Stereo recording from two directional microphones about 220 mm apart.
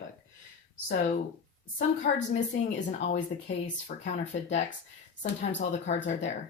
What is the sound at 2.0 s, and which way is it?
Speech, 45° left (ahead or behind).